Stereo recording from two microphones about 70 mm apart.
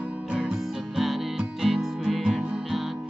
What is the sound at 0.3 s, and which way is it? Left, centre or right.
Music, centre.